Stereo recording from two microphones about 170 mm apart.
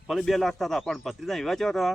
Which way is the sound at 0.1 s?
Centre (ahead or behind).